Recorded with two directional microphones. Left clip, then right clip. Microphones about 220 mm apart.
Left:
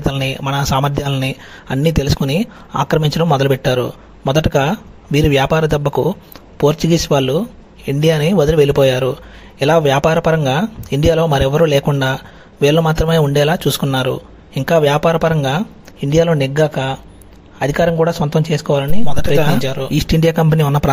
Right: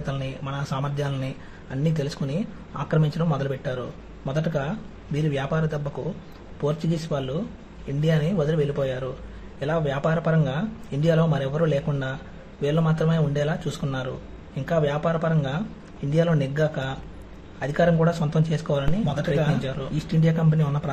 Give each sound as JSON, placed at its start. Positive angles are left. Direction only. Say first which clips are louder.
{"t": 0.0, "sound": "speech", "louder": "left 13 dB", "side_deg": 40}
{"t": 19.9, "sound": "speech", "louder": "left 13 dB", "side_deg": 40}